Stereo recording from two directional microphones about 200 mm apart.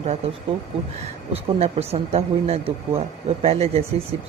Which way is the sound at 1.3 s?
30° right (ahead or behind).